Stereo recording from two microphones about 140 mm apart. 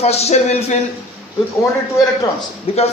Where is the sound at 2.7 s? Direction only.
45° left (ahead or behind).